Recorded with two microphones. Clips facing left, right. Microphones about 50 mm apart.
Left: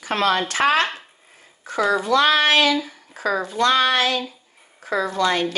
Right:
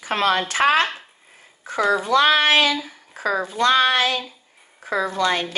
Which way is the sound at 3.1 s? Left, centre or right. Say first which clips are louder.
Even; right.